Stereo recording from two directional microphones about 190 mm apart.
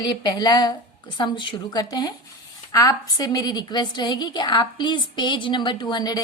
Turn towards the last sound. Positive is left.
turn(degrees=20)  # may be behind; listen again after turning